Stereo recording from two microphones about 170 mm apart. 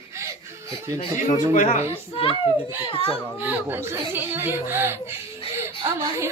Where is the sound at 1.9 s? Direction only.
30° left (ahead or behind).